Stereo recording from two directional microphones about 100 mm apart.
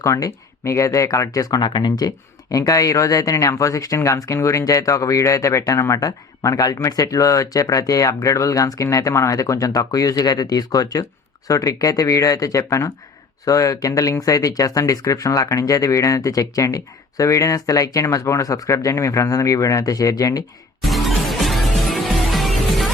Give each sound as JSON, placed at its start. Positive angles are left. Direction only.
{"t": 0.0, "sound": "speech", "side_deg": 35}
{"t": 20.8, "sound": "music", "side_deg": 0}